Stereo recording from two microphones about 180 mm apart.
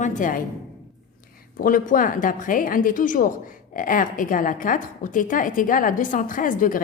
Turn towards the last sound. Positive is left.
turn(degrees=45)  # may be behind; listen again after turning